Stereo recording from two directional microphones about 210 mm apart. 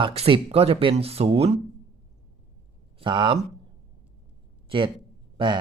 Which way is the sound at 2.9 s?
20° right (ahead or behind).